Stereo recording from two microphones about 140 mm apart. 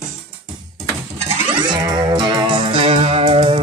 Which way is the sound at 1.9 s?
30° right (ahead or behind).